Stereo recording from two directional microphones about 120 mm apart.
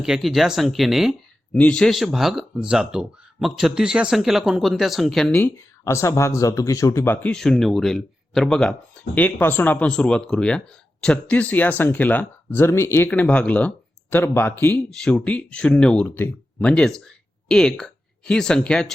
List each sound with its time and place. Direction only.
0.0 s speech: 5° right (ahead or behind)
1.5 s speech: 10° left (ahead or behind)
5.3 s speech: 20° left (ahead or behind)
7.3 s speech: 5° left (ahead or behind)
9.1 s speech: 15° left (ahead or behind)
13.1 s speech: 10° left (ahead or behind)
16.6 s speech: 5° left (ahead or behind)